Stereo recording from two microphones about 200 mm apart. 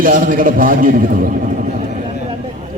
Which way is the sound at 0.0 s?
45° right (ahead or behind).